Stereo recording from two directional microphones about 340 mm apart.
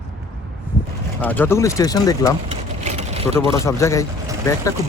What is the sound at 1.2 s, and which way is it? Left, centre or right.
Speech, centre.